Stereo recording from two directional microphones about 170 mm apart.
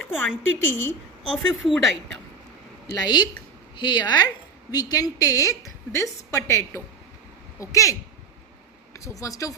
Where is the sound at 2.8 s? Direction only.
25° left (ahead or behind).